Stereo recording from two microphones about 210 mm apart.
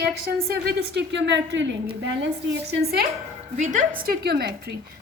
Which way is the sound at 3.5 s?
35° right (ahead or behind).